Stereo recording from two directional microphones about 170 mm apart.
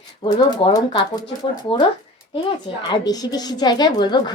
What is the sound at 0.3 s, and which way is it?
Speech, 25° left (ahead or behind).